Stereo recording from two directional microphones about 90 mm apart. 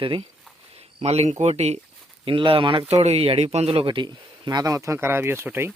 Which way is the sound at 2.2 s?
85° right.